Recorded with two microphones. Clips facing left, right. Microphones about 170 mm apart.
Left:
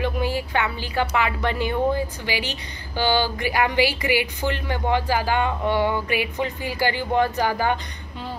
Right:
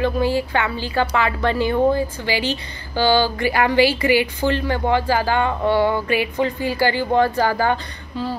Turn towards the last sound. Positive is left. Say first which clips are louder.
# right 3 dB
turn(degrees=15)  # may be behind; listen again after turning